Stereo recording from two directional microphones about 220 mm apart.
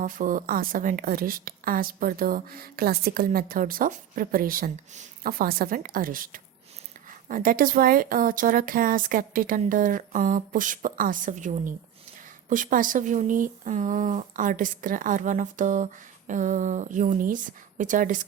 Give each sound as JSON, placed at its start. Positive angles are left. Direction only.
{"t": 0.0, "sound": "speech", "side_deg": -35}